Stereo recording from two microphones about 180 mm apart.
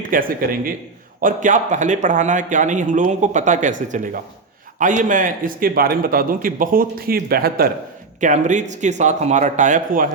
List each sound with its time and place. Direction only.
0.1 s speech: 50° right (ahead or behind)
8.2 s speech: 45° right (ahead or behind)